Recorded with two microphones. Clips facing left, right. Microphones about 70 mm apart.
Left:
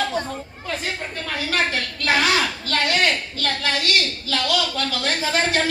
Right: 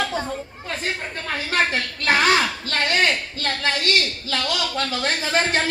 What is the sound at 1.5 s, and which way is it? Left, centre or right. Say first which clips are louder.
A woman's voice: right 2 dB; right.